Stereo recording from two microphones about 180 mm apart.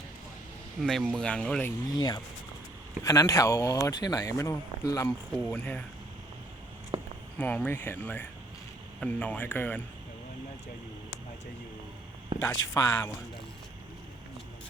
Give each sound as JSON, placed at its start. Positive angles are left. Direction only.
{"t": 0.8, "sound": "speech", "side_deg": 0}
{"t": 1.9, "sound": "speech", "side_deg": 25}
{"t": 6.9, "sound": "a sound", "side_deg": -30}
{"t": 7.3, "sound": "speech", "side_deg": 10}
{"t": 12.3, "sound": "a sound", "side_deg": -25}
{"t": 12.7, "sound": "speech", "side_deg": 20}